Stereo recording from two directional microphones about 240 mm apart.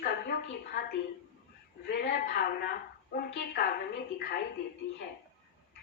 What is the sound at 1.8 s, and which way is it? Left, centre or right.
A woman's voice, left.